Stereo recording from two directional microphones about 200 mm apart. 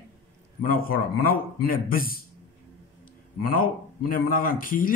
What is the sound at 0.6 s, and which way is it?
Speech, 45° left (ahead or behind).